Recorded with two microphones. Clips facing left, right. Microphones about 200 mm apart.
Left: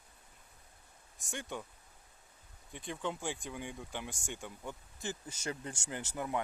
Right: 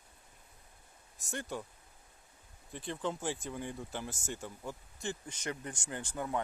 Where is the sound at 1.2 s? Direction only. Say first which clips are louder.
Right 2 dB; centre (ahead or behind).